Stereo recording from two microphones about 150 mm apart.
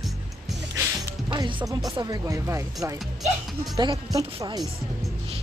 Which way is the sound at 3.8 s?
25° right (ahead or behind).